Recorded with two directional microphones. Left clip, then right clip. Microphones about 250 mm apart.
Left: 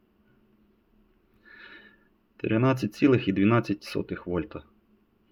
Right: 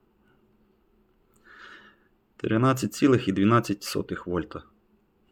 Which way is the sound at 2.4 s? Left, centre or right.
Centre.